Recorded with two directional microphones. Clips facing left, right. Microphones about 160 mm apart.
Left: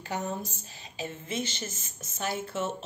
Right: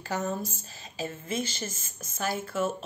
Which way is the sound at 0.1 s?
20° left (ahead or behind).